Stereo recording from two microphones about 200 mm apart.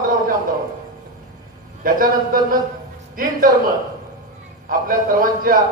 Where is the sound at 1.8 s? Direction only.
45° right (ahead or behind).